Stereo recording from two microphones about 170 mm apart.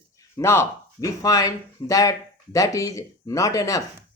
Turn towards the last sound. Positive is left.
turn(degrees=20)  # may be behind; listen again after turning